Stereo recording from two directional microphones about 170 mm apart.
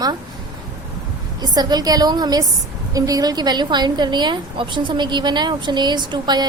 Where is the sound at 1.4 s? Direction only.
25° right (ahead or behind).